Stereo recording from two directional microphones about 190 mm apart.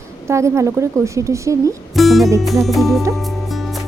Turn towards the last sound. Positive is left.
turn(degrees=0)  # may be behind; listen again after turning